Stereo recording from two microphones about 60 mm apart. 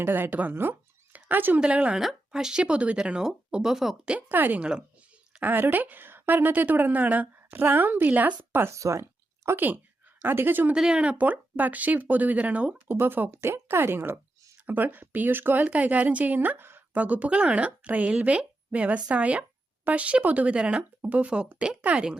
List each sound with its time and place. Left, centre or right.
0.0 s a woman's voice: right
0.5 s a woman's voice: right
1.1 s a sound: right
1.5 s speech: right
4.3 s a woman's voice: right
8.7 s speech: right
9.6 s a woman's voice: right
10.8 s speech: centre
12.9 s a woman's voice: right
17.0 s speech: right